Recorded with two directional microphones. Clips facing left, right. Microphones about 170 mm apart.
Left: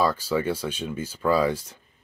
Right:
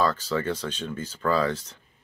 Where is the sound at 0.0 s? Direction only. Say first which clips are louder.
Left 2 dB; 10° left (ahead or behind).